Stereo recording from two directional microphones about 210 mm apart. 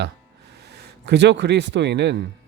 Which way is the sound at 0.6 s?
50° right (ahead or behind).